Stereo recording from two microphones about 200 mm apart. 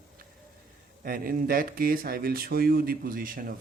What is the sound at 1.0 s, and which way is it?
Speech, 45° right (ahead or behind).